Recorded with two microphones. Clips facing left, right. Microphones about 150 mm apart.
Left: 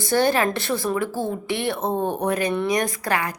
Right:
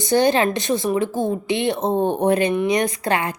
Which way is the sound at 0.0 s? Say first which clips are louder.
Right 3 dB; 20° right (ahead or behind).